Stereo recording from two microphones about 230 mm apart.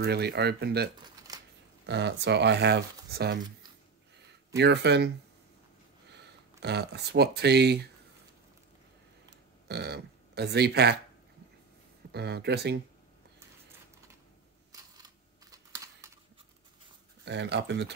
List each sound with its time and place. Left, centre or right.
0.0 s speech: right
0.9 s shuffling cards: centre
1.9 s speech: right
4.6 s speech: right
9.7 s speech: right
12.1 s speech: right
15.5 s computer keyboard: centre
17.2 s speech: right